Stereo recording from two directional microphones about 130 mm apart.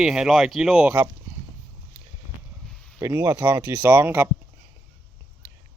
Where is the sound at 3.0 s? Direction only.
20° right (ahead or behind).